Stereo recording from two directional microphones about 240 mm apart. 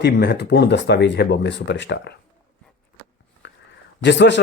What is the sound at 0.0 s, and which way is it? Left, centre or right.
Speech, left.